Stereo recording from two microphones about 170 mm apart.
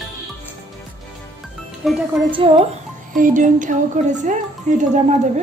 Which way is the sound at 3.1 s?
50° right (ahead or behind).